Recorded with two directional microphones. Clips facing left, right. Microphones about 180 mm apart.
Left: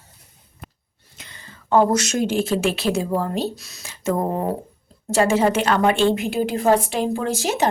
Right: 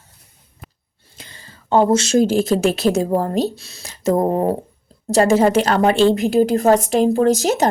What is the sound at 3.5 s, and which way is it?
A woman's voice, 30° right (ahead or behind).